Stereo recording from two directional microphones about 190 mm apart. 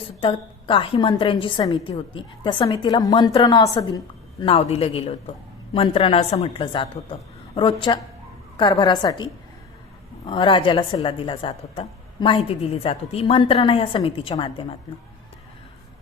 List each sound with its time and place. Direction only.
0.2 s a woman's voice: 25° left (ahead or behind)